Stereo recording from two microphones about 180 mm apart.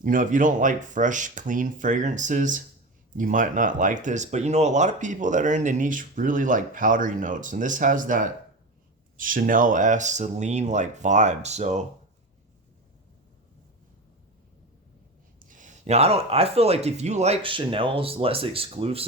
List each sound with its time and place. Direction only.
0.0 s speech: 50° right (ahead or behind)
15.4 s speech: 45° right (ahead or behind)